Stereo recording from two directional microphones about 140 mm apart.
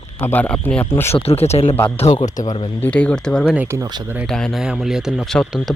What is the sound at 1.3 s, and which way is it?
Speech, 45° left (ahead or behind).